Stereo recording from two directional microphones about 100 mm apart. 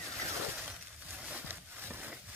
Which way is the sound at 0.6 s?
10° right (ahead or behind).